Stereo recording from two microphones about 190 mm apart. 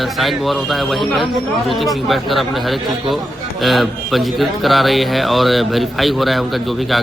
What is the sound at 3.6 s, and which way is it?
A man's voice, centre (ahead or behind).